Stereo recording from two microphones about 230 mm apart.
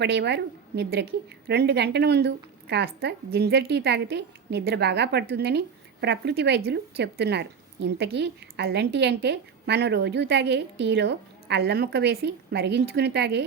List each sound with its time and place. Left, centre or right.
0.0 s speech: right